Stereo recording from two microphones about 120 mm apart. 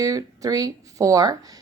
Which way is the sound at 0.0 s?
30° right (ahead or behind).